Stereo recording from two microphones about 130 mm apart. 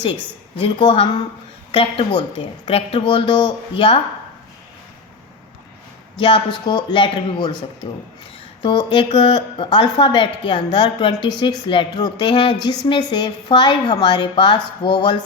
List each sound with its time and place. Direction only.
0.6 s a woman's voice: 40° left (ahead or behind)
6.1 s a woman's voice: 40° left (ahead or behind)
8.6 s a woman's voice: 40° left (ahead or behind)